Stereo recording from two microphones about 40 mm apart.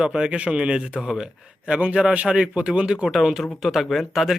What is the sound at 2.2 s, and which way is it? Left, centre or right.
Speech, right.